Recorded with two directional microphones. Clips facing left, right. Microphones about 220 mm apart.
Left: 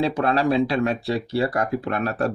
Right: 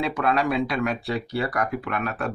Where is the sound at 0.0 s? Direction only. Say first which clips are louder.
Left 3 dB; 30° left (ahead or behind).